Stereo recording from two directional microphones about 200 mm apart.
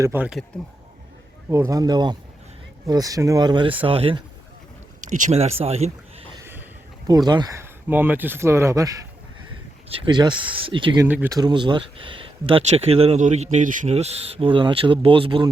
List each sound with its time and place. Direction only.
0.0 s speech: 10° right (ahead or behind)
1.5 s speech: 15° right (ahead or behind)
4.9 s speech: 40° right (ahead or behind)
6.4 s a sound: 10° right (ahead or behind)
7.1 s speech: 20° right (ahead or behind)
9.9 s speech: 25° right (ahead or behind)
11.1 s speech: 10° right (ahead or behind)
11.3 s speech: 20° right (ahead or behind)